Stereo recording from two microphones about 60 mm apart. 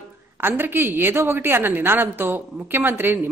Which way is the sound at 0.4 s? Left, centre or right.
Right.